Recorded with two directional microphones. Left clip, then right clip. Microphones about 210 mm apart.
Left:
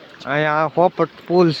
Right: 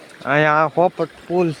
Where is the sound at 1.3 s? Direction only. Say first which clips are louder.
Left 4 dB; 15° left (ahead or behind).